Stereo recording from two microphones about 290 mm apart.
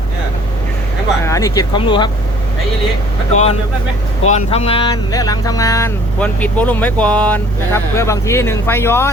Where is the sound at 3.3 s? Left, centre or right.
Left.